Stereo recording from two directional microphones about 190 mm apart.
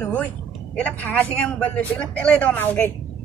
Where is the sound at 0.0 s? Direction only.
10° left (ahead or behind).